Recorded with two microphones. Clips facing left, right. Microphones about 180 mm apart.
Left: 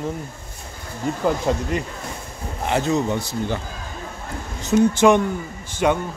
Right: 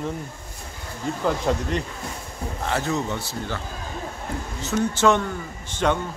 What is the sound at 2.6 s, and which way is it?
Speech, 20° left (ahead or behind).